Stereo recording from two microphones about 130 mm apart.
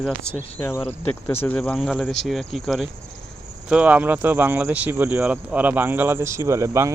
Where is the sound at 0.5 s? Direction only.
20° left (ahead or behind).